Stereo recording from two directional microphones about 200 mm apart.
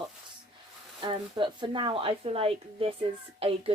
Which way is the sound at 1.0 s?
25° right (ahead or behind).